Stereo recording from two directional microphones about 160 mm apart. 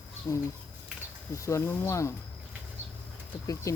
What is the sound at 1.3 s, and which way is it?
Speech, 20° left (ahead or behind).